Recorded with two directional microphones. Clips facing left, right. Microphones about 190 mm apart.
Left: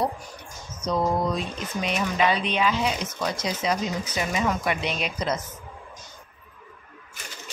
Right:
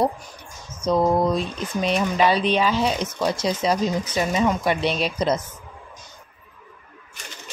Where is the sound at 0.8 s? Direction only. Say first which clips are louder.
Right 5 dB; 35° right (ahead or behind).